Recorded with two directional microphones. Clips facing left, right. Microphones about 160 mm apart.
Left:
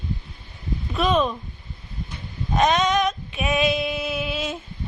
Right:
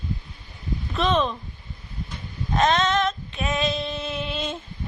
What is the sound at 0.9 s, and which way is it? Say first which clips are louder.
Speech: left 2 dB; 10° left (ahead or behind).